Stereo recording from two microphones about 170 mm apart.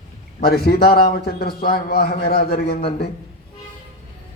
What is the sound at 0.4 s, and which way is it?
Speech, 70° left (ahead or behind).